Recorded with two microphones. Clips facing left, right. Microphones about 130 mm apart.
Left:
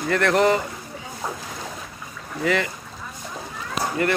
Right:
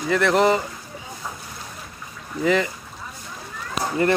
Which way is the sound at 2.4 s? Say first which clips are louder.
Right 2 dB; 20° right (ahead or behind).